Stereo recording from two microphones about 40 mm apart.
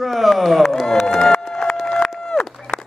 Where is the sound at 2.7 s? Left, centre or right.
Right.